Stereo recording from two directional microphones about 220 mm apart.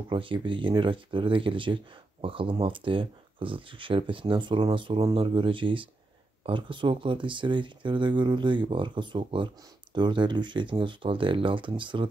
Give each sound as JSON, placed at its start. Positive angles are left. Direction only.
{"t": 0.1, "sound": "speech", "side_deg": -25}